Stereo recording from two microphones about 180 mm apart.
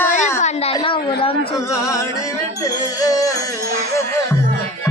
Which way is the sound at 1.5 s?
15° left (ahead or behind).